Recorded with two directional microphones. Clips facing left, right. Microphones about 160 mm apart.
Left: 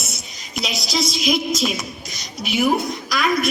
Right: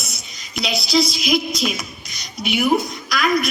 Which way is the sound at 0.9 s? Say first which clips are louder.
Right 2 dB; 45° left (ahead or behind).